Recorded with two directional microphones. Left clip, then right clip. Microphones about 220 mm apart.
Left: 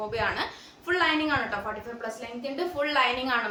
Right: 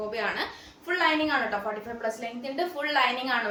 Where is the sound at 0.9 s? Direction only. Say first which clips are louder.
Even; 15° left (ahead or behind).